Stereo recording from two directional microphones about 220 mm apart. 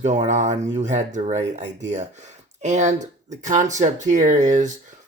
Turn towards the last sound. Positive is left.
turn(degrees=-35)  # may be behind; listen again after turning